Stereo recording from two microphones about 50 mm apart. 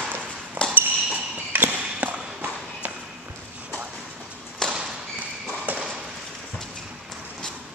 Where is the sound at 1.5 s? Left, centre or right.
Right.